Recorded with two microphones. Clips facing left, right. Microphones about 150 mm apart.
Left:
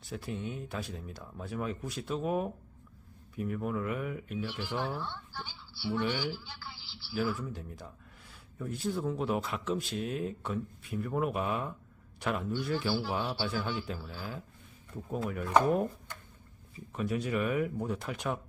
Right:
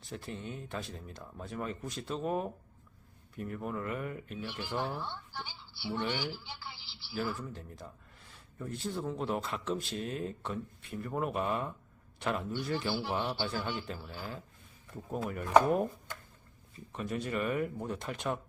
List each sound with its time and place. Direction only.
0.0 s speech: 5° left (ahead or behind)
4.6 s speech: 10° right (ahead or behind)
6.0 s speech: centre (ahead or behind)
6.3 s a woman's voice: 20° right (ahead or behind)
7.1 s speech: centre (ahead or behind)